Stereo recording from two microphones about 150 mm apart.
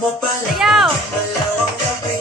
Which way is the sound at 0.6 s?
Centre (ahead or behind).